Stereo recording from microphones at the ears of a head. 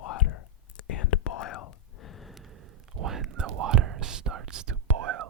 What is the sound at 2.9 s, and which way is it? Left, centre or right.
Whispering, right.